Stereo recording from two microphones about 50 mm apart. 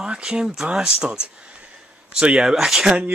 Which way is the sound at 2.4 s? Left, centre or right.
Centre.